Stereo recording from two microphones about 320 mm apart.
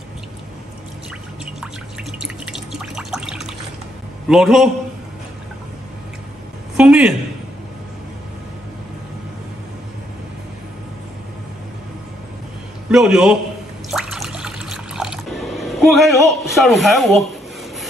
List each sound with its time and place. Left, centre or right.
2.1 s drip: centre
4.3 s a man's voice: centre
6.8 s a man's voice: centre
12.9 s a man's voice: centre
13.8 s water: centre